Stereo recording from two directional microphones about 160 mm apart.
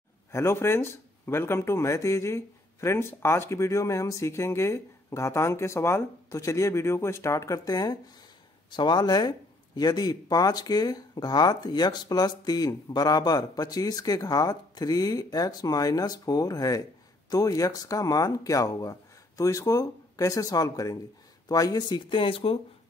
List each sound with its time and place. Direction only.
0.3 s speech: 15° left (ahead or behind); by 22.6 s 35° left (ahead or behind)